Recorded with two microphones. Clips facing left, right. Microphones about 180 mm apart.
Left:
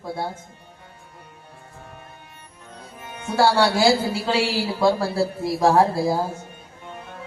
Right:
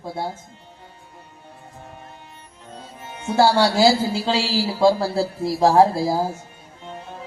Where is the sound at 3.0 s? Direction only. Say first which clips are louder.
Right 2 dB; 25° right (ahead or behind).